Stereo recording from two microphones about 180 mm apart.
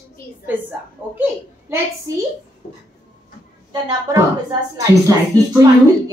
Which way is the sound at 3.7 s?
20° right (ahead or behind).